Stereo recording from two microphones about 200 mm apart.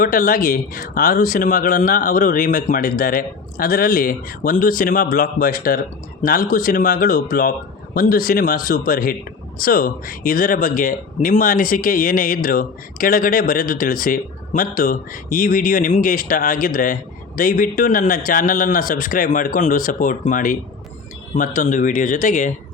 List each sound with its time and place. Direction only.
0.0 s speech: 45° left (ahead or behind)